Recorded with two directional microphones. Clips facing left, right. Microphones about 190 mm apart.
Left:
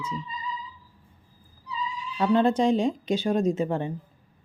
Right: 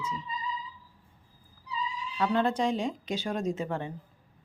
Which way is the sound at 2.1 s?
25° left (ahead or behind).